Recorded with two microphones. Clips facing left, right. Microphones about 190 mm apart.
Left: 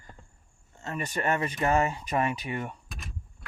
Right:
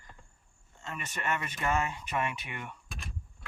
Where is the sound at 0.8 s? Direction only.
40° left (ahead or behind).